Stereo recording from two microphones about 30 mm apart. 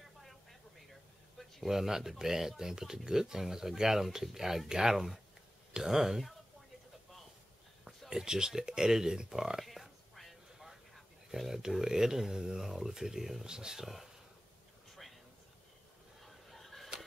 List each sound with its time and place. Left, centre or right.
0.2 s a sound: centre
1.7 s speech: centre
5.7 s speech: centre
8.1 s speech: right
9.7 s a sound: centre
11.3 s speech: centre
11.8 s speech: centre
13.5 s speech: right
13.8 s speech: centre
16.2 s a sound: centre